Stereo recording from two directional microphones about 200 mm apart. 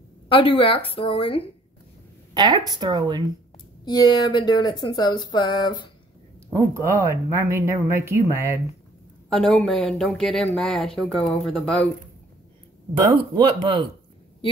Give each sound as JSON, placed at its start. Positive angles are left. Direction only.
{"t": 0.3, "sound": "speech", "side_deg": 25}
{"t": 2.3, "sound": "speech", "side_deg": -20}
{"t": 3.8, "sound": "speech", "side_deg": 20}
{"t": 6.5, "sound": "speech", "side_deg": -15}
{"t": 9.3, "sound": "speech", "side_deg": 5}
{"t": 13.3, "sound": "speech", "side_deg": -25}